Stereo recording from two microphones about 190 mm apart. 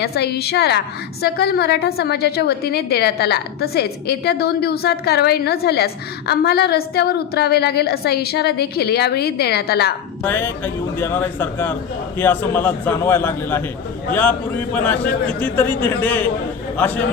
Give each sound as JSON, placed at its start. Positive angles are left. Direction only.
{"t": 0.0, "sound": "a woman's voice", "side_deg": 60}
{"t": 10.2, "sound": "a man's voice", "side_deg": 10}